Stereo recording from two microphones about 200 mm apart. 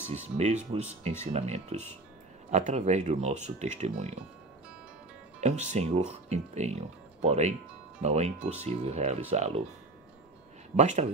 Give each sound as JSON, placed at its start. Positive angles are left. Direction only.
{"t": 0.1, "sound": "speech", "side_deg": -35}
{"t": 5.4, "sound": "speech", "side_deg": -35}
{"t": 10.8, "sound": "speech", "side_deg": -35}